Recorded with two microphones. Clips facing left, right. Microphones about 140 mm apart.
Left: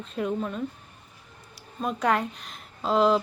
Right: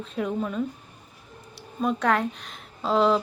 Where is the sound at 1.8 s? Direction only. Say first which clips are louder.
Right 2 dB; centre (ahead or behind).